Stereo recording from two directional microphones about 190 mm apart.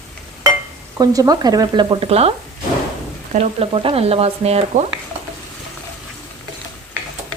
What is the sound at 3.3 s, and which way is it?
Speech, 30° right (ahead or behind).